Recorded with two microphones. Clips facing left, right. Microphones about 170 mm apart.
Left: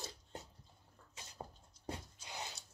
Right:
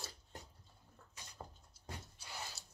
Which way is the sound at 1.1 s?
20° left (ahead or behind).